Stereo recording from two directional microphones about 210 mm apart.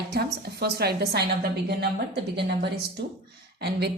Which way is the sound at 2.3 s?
50° right (ahead or behind).